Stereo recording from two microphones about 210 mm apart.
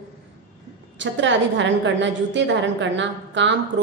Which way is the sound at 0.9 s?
60° right (ahead or behind).